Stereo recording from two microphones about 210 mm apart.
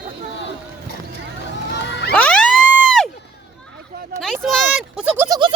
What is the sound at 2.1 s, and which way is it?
Emergency vehicle, 5° left (ahead or behind).